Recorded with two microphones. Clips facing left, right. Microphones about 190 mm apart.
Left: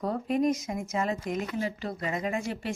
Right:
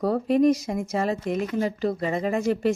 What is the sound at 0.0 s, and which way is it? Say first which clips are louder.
Speech: right 7 dB; 75° right (ahead or behind).